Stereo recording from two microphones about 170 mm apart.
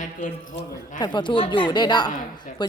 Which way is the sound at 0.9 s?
25° left (ahead or behind).